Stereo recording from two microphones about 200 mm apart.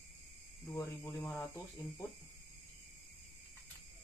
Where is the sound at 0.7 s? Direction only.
10° left (ahead or behind).